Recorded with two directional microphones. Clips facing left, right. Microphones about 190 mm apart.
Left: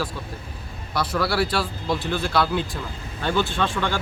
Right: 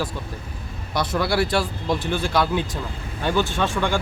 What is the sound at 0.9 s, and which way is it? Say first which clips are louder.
Speech: right 1 dB; 20° right (ahead or behind).